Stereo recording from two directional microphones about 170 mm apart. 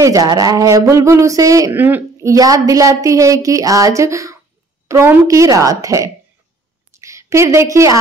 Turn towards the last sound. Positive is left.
turn(degrees=-15)  # may be behind; listen again after turning